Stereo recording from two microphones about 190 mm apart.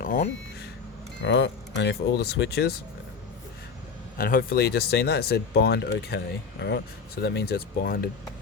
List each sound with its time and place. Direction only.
0.0 s speech: 45° left (ahead or behind)
1.2 s speech: 65° left (ahead or behind)
4.2 s speech: 50° left (ahead or behind)